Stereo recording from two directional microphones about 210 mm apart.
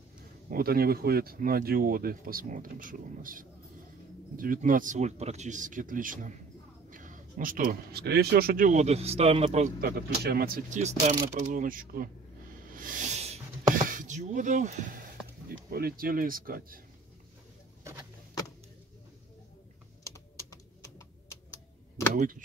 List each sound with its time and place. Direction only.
0.5 s a man's voice: 45° right (ahead or behind)
12.6 s a sound: 40° right (ahead or behind)
15.4 s speech: 45° right (ahead or behind)
22.1 s speech: 40° right (ahead or behind)